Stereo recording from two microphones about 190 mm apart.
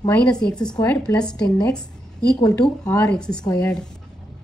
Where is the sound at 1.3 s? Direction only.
20° left (ahead or behind).